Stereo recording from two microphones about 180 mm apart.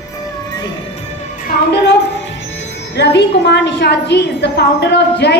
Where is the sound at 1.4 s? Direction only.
70° left (ahead or behind).